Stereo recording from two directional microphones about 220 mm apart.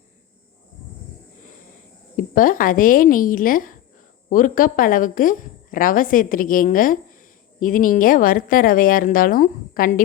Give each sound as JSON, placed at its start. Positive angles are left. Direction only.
{"t": 2.1, "sound": "a woman's voice", "side_deg": 40}